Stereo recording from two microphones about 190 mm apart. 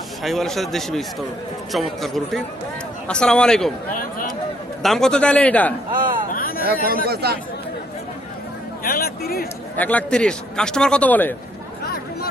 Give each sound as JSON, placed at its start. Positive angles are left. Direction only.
{"t": 0.2, "sound": "a man's voice", "side_deg": 0}
{"t": 6.3, "sound": "a sound", "side_deg": 50}
{"t": 6.7, "sound": "speech", "side_deg": 50}
{"t": 7.1, "sound": "speech", "side_deg": -55}
{"t": 8.8, "sound": "speech", "side_deg": 50}
{"t": 9.7, "sound": "a man's voice", "side_deg": 10}